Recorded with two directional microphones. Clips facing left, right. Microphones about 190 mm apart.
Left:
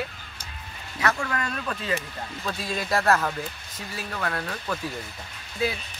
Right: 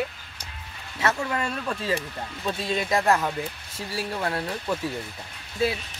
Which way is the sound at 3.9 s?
30° right (ahead or behind).